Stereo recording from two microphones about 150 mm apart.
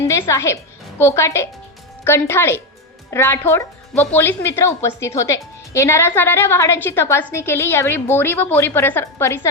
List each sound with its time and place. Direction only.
0.0 s a woman's voice: 20° left (ahead or behind)